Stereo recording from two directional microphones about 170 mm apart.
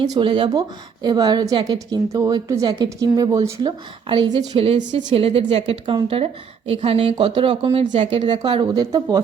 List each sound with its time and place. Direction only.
0.0 s a woman's voice: 30° right (ahead or behind)